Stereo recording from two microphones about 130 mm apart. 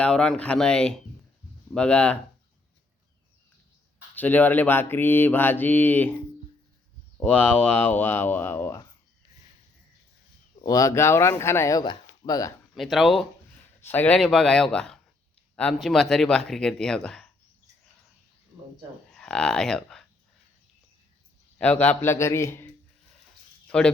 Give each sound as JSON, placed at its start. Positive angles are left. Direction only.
{"t": 0.0, "sound": "speech", "side_deg": 5}
{"t": 4.1, "sound": "speech", "side_deg": 15}
{"t": 7.2, "sound": "speech", "side_deg": 10}
{"t": 10.7, "sound": "speech", "side_deg": 25}
{"t": 12.7, "sound": "speech", "side_deg": 0}
{"t": 13.8, "sound": "speech", "side_deg": 15}
{"t": 19.1, "sound": "speech", "side_deg": 5}
{"t": 21.6, "sound": "speech", "side_deg": 10}
{"t": 23.6, "sound": "a sound", "side_deg": 5}